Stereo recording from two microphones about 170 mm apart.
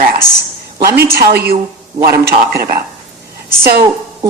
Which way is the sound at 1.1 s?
65° right (ahead or behind).